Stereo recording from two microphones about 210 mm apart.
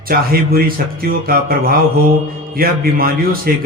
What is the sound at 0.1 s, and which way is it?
A man's voice, 45° right (ahead or behind).